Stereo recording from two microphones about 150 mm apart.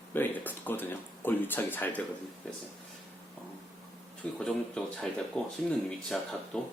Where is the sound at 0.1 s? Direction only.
15° left (ahead or behind).